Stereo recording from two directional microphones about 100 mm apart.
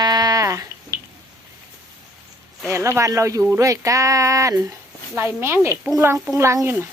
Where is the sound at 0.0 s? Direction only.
40° right (ahead or behind).